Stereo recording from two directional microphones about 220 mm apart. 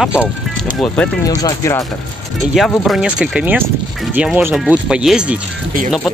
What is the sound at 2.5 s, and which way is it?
Speech, centre (ahead or behind).